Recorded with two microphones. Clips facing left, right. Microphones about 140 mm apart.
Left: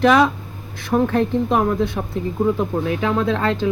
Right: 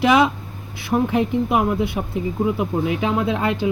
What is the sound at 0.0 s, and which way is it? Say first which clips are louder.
Speech: left 1 dB; 10° right (ahead or behind).